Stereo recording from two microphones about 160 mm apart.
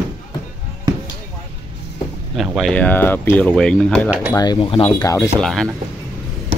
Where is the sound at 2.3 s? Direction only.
Centre (ahead or behind).